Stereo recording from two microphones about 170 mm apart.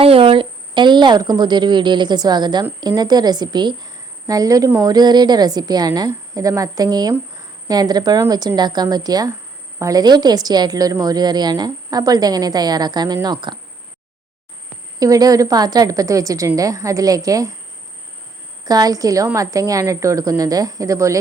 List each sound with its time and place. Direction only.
0.0 s a woman's voice: 35° right (ahead or behind)
14.9 s a woman's voice: 20° right (ahead or behind)
18.6 s a woman's voice: 20° right (ahead or behind)